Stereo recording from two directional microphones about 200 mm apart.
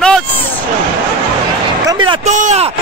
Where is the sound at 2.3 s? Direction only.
35° right (ahead or behind).